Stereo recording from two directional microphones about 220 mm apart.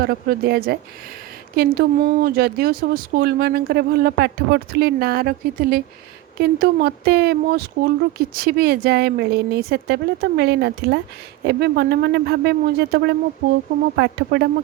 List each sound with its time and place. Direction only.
0.0 s speech: 45° right (ahead or behind)